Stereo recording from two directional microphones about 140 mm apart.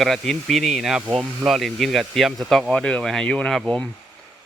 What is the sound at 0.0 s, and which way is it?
A man's voice, centre (ahead or behind).